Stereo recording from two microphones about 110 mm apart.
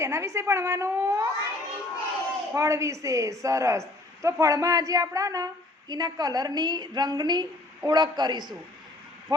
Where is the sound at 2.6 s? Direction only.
30° right (ahead or behind).